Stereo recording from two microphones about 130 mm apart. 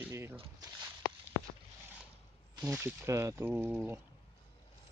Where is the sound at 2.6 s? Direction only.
15° right (ahead or behind).